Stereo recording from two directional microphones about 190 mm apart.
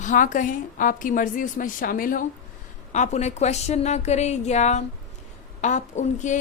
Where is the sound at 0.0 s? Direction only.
40° left (ahead or behind).